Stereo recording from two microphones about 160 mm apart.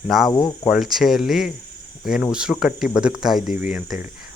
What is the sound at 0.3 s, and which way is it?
Cricket, 25° left (ahead or behind).